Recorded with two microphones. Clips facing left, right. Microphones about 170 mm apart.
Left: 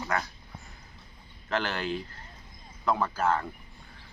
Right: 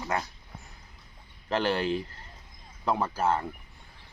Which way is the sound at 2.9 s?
30° right (ahead or behind).